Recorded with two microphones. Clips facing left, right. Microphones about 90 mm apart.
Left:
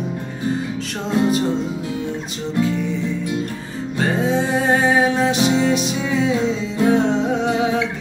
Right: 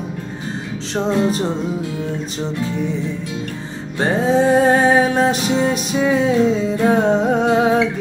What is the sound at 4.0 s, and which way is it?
Music, 35° right (ahead or behind).